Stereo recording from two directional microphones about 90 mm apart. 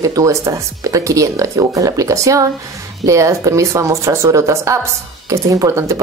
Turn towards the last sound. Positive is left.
turn(degrees=-35)  # may be behind; listen again after turning